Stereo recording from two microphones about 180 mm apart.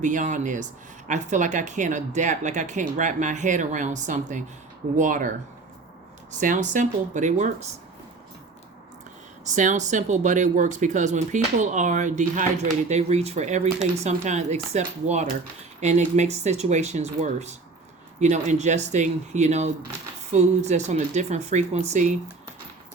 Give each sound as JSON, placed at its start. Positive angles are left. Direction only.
{"t": 0.0, "sound": "speech", "side_deg": -45}
{"t": 6.4, "sound": "speech", "side_deg": -45}
{"t": 9.6, "sound": "speech", "side_deg": -40}